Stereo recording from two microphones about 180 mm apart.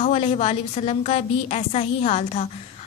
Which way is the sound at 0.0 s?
35° left (ahead or behind).